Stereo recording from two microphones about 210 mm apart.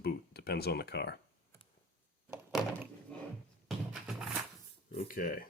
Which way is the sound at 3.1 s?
5° left (ahead or behind).